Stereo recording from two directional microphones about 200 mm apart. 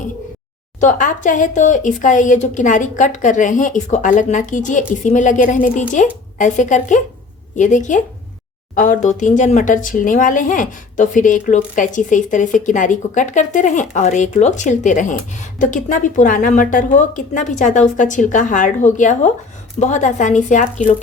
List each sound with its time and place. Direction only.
0.8 s speech: 40° left (ahead or behind)